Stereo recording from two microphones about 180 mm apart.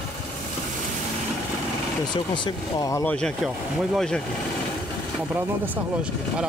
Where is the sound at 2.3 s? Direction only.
25° left (ahead or behind).